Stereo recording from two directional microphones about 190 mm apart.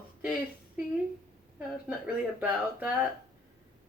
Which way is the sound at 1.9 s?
5° right (ahead or behind).